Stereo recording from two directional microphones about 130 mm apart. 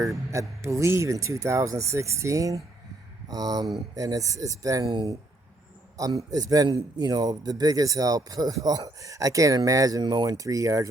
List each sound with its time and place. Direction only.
0.3 s a man's voice: 25° right (ahead or behind)